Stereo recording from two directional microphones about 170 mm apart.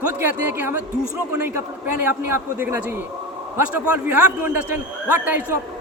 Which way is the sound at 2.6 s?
10° right (ahead or behind).